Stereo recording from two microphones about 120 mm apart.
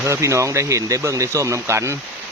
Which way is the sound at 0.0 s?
25° right (ahead or behind).